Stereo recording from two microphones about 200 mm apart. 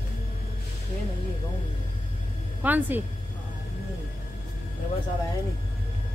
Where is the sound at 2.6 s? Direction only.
10° right (ahead or behind).